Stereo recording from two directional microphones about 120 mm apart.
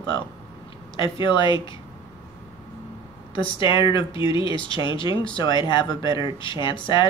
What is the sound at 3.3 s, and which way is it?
Speech, 45° left (ahead or behind).